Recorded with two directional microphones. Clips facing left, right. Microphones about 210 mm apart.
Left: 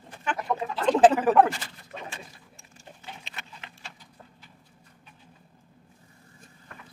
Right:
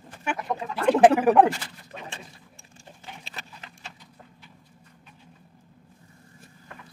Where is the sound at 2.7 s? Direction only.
35° right (ahead or behind).